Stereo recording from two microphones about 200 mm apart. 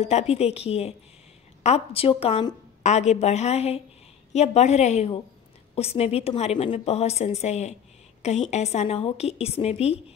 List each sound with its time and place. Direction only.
0.0 s a woman's voice: 35° left (ahead or behind)